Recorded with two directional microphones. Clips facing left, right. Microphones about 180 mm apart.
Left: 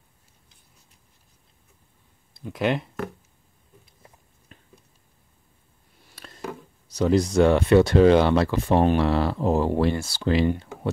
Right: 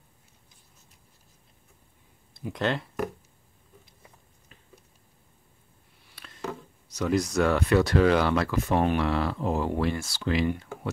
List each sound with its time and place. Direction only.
2.6 s speech: 15° left (ahead or behind)
6.1 s a sound: 40° left (ahead or behind)
7.0 s speech: 30° left (ahead or behind)